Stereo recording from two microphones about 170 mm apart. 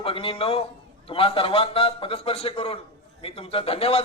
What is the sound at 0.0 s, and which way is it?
A man's voice, 30° left (ahead or behind).